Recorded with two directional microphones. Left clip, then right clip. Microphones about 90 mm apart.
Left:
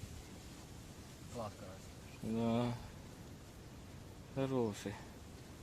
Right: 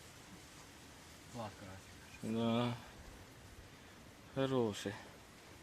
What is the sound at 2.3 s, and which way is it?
Speech, 30° left (ahead or behind).